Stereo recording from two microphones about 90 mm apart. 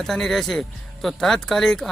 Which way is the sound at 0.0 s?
5° left (ahead or behind).